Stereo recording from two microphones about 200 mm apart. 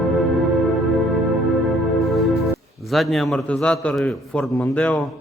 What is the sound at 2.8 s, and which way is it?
A man's voice, centre (ahead or behind).